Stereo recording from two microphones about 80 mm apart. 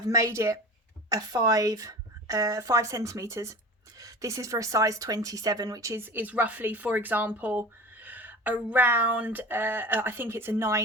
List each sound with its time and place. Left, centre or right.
0.1 s speech: right
1.1 s a woman's voice: right
5.9 s speech: right